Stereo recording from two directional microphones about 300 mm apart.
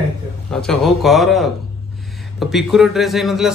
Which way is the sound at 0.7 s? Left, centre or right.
Centre.